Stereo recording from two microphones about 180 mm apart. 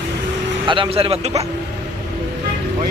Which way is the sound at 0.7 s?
30° right (ahead or behind).